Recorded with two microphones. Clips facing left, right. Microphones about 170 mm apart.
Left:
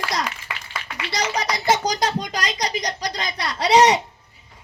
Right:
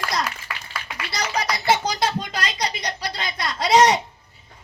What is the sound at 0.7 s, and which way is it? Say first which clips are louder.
A child's voice: left 3 dB; 15° left (ahead or behind).